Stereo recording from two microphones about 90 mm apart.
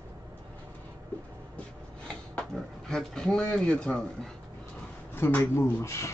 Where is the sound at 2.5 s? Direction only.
5° left (ahead or behind).